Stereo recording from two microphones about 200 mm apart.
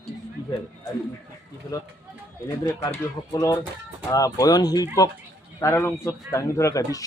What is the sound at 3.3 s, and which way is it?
Speech, 15° left (ahead or behind).